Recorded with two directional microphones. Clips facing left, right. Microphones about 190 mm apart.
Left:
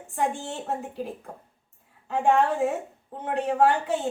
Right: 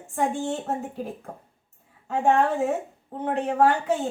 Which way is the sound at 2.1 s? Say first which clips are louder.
Right 1 dB; 45° right (ahead or behind).